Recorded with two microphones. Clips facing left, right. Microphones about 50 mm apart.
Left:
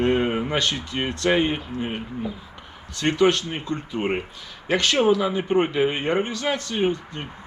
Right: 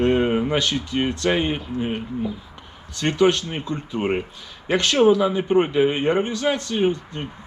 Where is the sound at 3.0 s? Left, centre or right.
Centre.